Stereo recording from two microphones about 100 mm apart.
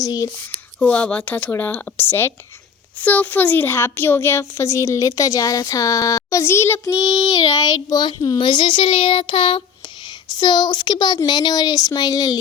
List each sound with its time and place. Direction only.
0.0 s a woman's voice: 35° left (ahead or behind)
0.8 s a child's voice: 15° left (ahead or behind)
6.9 s child singing: 10° right (ahead or behind)
7.5 s a woman's voice: 35° left (ahead or behind)
8.4 s speech: 55° left (ahead or behind)
10.3 s a woman's voice: 45° left (ahead or behind)